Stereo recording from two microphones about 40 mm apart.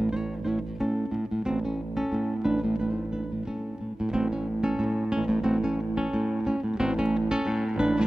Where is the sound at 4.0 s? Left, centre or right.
Centre.